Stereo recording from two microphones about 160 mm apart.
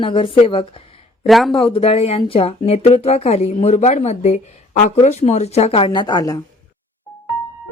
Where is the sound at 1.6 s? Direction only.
35° left (ahead or behind).